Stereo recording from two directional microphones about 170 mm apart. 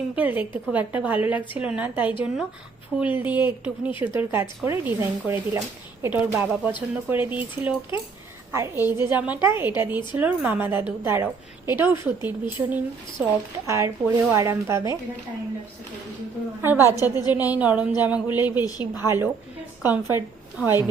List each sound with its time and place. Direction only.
0.2 s a woman's voice: 10° right (ahead or behind)
16.6 s a woman's voice: 15° right (ahead or behind)
16.9 s a woman's voice: 20° left (ahead or behind)
17.5 s a woman's voice: 10° right (ahead or behind)
18.6 s a woman's voice: 20° left (ahead or behind)
19.0 s a woman's voice: 15° right (ahead or behind)